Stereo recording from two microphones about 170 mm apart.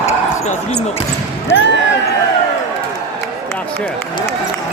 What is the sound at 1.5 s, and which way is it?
Speech, 90° left.